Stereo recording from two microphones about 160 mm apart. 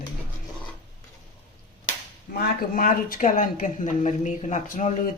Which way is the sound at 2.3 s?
70° left (ahead or behind).